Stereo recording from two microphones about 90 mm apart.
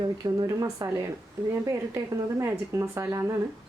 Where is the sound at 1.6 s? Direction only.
30° right (ahead or behind).